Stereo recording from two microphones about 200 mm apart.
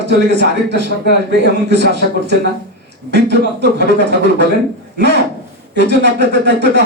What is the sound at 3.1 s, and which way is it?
A man's voice, 60° right (ahead or behind).